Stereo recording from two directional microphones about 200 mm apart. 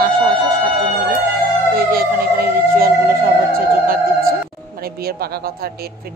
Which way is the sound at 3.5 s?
45° right (ahead or behind).